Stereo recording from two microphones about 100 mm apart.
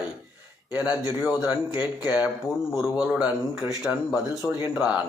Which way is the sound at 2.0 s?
15° right (ahead or behind).